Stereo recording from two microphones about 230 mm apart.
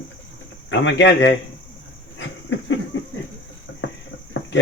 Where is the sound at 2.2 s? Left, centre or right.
Left.